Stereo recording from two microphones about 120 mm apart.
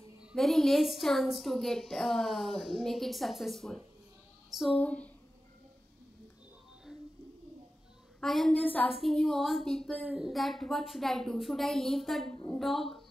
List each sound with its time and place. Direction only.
0.2 s a woman's voice: centre (ahead or behind)
8.2 s a woman's voice: centre (ahead or behind)
8.9 s a woman's voice: centre (ahead or behind)